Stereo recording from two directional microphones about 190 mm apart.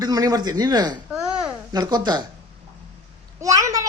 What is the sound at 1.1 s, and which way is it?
Babbling, 5° right (ahead or behind).